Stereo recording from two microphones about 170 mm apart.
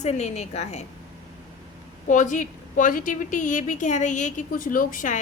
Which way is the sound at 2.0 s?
45° left (ahead or behind).